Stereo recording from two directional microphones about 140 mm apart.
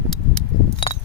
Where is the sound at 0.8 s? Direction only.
40° left (ahead or behind).